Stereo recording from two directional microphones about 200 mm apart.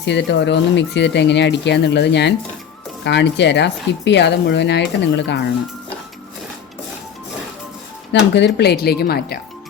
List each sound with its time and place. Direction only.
0.0 s speech: 60° left (ahead or behind)
8.3 s speech: 55° left (ahead or behind)